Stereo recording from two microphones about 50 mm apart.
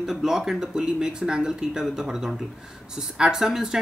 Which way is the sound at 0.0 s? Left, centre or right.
Centre.